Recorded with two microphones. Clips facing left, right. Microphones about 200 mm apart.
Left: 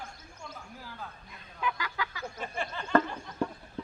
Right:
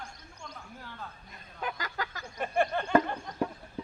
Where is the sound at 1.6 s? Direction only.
45° right (ahead or behind).